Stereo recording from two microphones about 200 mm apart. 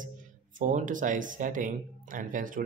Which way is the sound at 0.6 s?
40° right (ahead or behind).